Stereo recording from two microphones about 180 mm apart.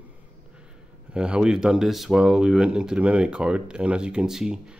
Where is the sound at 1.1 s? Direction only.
5° right (ahead or behind).